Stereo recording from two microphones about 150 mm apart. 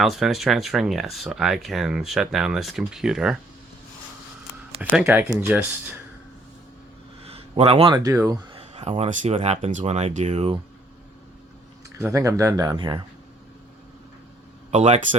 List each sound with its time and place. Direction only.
0.0 s speech: centre (ahead or behind)
4.8 s speech: 10° right (ahead or behind)
7.3 s a sound: 40° right (ahead or behind)
8.0 s speech: 20° right (ahead or behind)
8.5 s speech: 45° right (ahead or behind)
11.9 s speech: 20° right (ahead or behind)
14.7 s speech: 50° right (ahead or behind)